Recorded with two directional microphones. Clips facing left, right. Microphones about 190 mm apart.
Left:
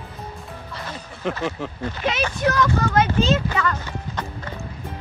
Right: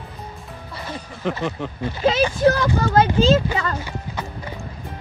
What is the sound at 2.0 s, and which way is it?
Speech, 30° right (ahead or behind).